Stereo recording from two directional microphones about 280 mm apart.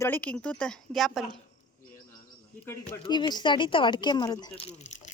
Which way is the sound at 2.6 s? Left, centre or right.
Centre.